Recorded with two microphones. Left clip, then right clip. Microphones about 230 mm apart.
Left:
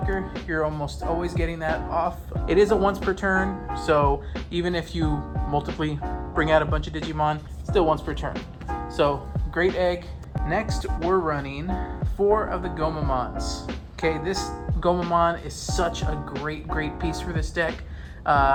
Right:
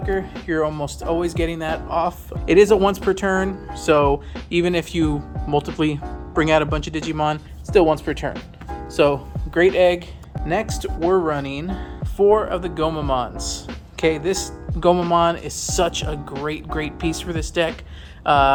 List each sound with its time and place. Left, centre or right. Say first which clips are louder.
0.0 s music: right 5 dB; right
0.4 s speech: right 4 dB; right
8.3 s speech: right 1 dB; centre
9.7 s speech: right 8 dB; right